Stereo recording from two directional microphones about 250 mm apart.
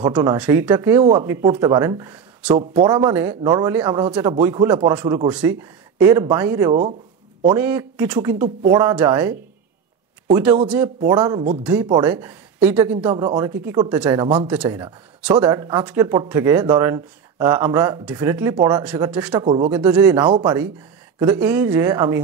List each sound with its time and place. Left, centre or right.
0.0 s speech: centre
6.7 s speech: right
7.4 s speech: centre
13.1 s a man's voice: centre
14.2 s speech: centre
14.5 s a man's voice: centre
19.4 s speech: right
19.7 s speech: centre
20.2 s speech: centre